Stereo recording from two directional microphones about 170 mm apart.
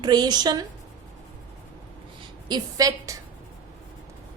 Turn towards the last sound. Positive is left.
turn(degrees=-20)  # may be behind; listen again after turning